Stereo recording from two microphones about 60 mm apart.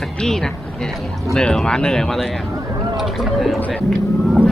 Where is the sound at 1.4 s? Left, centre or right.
Centre.